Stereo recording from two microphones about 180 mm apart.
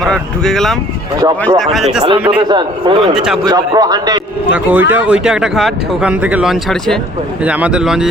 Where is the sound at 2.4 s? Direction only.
25° right (ahead or behind).